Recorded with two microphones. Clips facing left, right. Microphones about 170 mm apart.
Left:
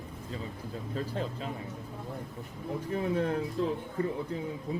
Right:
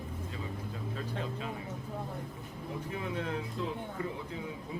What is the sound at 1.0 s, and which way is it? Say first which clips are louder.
Speech: left 5 dB; 35° left (ahead or behind).